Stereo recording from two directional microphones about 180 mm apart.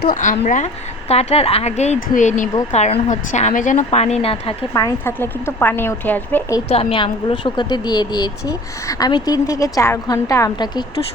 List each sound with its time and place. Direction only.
0.0 s a woman's voice: 45° left (ahead or behind); by 4.5 s 30° left (ahead or behind)
4.7 s a woman's voice: 20° left (ahead or behind)
6.7 s a woman's voice: 30° left (ahead or behind)